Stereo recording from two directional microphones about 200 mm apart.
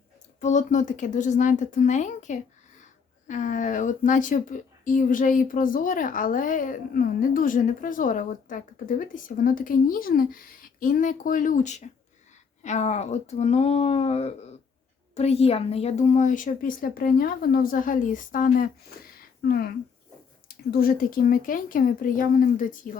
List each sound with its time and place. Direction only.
0.3 s a woman's voice: 35° left (ahead or behind)